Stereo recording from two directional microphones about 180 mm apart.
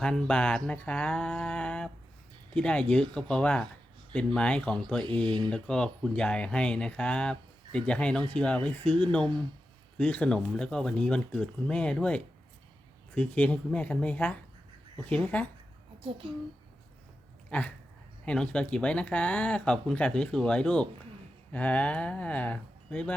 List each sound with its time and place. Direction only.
0.0 s speech: 5° left (ahead or behind)
5.2 s speech: 25° right (ahead or behind)
5.5 s speech: 5° left (ahead or behind)
16.0 s a child's voice: 30° right (ahead or behind)
17.5 s speech: 5° left (ahead or behind)